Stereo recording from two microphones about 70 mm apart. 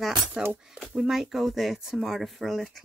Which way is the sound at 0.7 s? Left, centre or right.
Centre.